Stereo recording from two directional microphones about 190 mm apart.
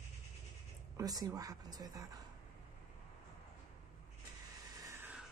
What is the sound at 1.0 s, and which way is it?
Speech, 20° right (ahead or behind).